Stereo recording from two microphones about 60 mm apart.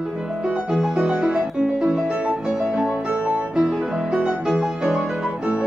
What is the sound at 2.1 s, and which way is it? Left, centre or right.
Music, right.